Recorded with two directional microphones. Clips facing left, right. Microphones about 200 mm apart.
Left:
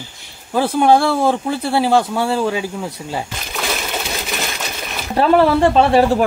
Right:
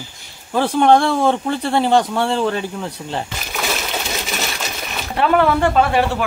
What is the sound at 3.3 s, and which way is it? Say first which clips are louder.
Coin: even; 5° right (ahead or behind).